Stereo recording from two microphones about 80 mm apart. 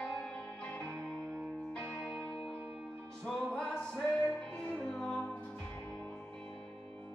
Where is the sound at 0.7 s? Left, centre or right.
Centre.